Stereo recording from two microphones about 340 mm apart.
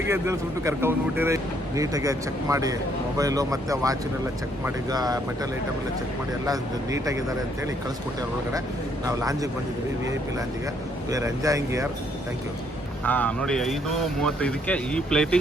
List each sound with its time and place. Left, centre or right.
0.1 s speech: centre
6.4 s speech: centre
9.0 s speech: centre
11.1 s speech: centre
13.1 s speech: centre